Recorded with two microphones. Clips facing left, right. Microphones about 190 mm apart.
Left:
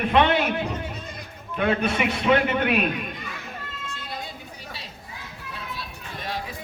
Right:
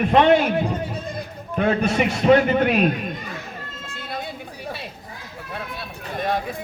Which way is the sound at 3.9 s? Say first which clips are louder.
Right 6 dB; 55° right (ahead or behind).